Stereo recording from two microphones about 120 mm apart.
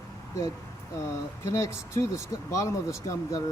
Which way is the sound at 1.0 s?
25° left (ahead or behind).